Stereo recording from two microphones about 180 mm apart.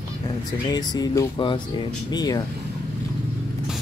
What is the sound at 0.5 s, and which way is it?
Speech, 20° left (ahead or behind).